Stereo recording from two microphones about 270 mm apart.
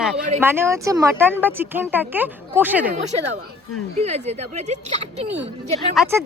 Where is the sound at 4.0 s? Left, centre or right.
Right.